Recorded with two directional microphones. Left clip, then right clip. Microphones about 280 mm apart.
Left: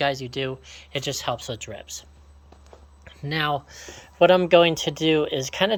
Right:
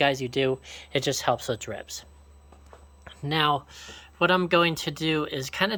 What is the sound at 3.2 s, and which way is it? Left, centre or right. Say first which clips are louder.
Speech: right 1 dB; centre.